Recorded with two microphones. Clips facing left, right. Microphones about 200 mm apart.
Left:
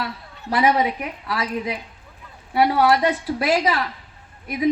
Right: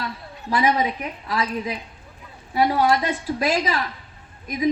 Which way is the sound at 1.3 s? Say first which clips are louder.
Even; 70° left (ahead or behind).